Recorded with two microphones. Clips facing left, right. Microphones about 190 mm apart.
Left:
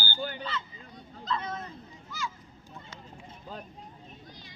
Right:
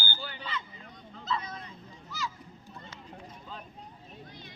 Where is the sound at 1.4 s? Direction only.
50° left (ahead or behind).